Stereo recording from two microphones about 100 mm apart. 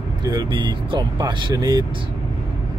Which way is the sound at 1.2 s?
40° right (ahead or behind).